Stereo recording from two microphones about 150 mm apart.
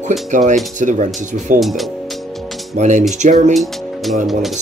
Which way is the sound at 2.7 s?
55° right (ahead or behind).